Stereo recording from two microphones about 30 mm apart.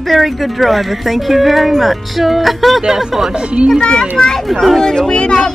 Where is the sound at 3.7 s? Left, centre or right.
Left.